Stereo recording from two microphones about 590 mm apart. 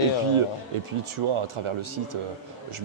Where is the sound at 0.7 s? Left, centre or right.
Right.